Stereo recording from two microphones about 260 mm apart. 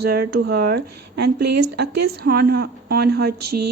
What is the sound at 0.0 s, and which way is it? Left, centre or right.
Speech, right.